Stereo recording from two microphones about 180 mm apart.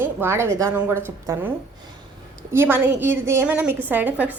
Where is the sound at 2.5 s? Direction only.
10° right (ahead or behind).